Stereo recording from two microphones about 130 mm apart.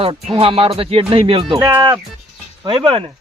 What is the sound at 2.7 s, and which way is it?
Speech, 40° right (ahead or behind).